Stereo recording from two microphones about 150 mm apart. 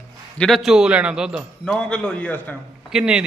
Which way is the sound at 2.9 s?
5° right (ahead or behind).